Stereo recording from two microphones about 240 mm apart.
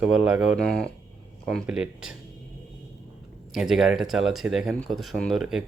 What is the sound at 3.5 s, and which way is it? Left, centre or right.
Speech, centre.